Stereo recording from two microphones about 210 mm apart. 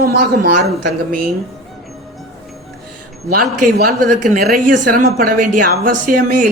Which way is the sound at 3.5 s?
40° right (ahead or behind).